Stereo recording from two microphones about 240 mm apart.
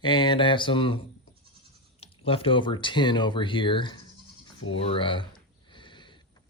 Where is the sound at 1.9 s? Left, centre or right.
Left.